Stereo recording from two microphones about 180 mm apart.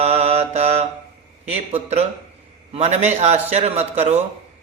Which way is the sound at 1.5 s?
35° right (ahead or behind).